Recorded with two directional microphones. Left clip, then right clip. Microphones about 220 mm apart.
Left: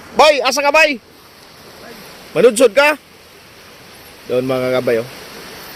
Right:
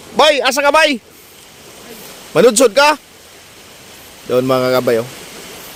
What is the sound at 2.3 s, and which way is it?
Speech, 20° right (ahead or behind).